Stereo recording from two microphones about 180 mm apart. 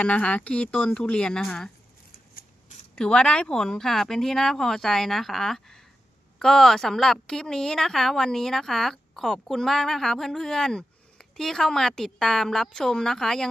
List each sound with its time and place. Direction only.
0.0 s speech: 5° left (ahead or behind)
2.1 s a sound: 55° left (ahead or behind)
2.9 s a woman's voice: 5° left (ahead or behind)